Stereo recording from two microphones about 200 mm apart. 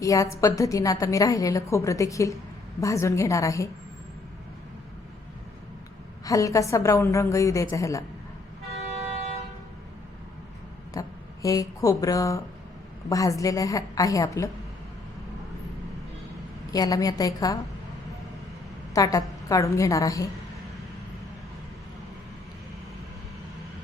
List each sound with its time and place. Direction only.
0.0 s a woman's voice: 15° left (ahead or behind)
6.2 s a woman's voice: 15° left (ahead or behind)
11.0 s a sound: 15° left (ahead or behind)
11.4 s a woman's voice: 15° left (ahead or behind)
16.7 s a woman's voice: 20° left (ahead or behind)
18.9 s a woman's voice: 15° left (ahead or behind)